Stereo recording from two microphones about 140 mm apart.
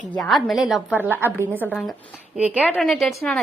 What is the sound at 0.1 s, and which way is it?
Speech, centre (ahead or behind).